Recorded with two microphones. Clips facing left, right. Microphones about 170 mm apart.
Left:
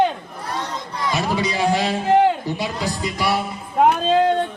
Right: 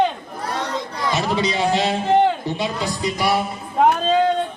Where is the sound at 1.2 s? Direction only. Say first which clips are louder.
Even; 25° right (ahead or behind).